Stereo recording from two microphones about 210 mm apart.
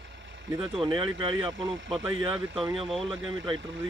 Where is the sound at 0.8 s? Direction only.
20° right (ahead or behind).